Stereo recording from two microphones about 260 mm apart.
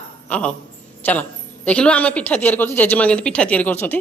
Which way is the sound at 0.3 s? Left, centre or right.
Centre.